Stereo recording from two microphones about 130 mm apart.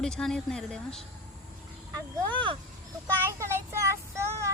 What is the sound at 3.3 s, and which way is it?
Speech, 20° right (ahead or behind).